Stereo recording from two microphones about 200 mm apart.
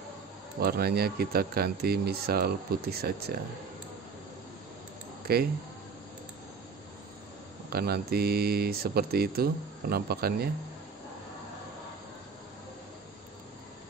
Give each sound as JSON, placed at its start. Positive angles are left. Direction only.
{"t": 0.6, "sound": "speech", "side_deg": -50}
{"t": 5.2, "sound": "speech", "side_deg": -50}
{"t": 7.7, "sound": "speech", "side_deg": -50}